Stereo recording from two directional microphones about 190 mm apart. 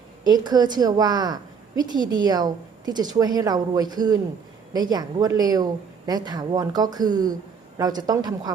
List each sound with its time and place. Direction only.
0.3 s a woman's voice: 20° right (ahead or behind)